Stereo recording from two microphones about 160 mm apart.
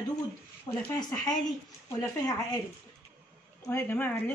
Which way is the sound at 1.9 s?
20° left (ahead or behind).